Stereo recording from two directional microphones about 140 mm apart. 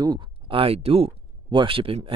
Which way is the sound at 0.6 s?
45° right (ahead or behind).